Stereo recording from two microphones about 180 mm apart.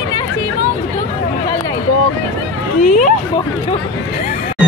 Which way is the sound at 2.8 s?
45° left (ahead or behind).